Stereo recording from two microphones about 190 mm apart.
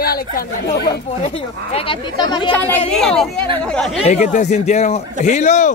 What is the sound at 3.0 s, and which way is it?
Speech, 5° left (ahead or behind).